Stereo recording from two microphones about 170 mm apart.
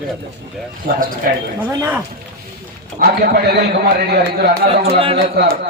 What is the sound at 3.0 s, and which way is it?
A man's voice, 65° right (ahead or behind).